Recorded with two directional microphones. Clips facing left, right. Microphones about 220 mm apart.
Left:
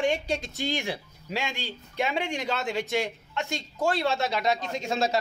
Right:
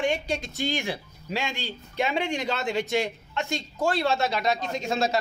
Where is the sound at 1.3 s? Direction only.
15° left (ahead or behind).